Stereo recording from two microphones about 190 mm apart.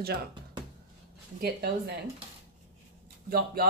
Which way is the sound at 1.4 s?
55° right (ahead or behind).